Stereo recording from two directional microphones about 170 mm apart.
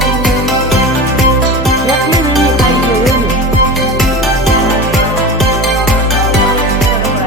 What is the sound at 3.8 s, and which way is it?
Music, centre (ahead or behind).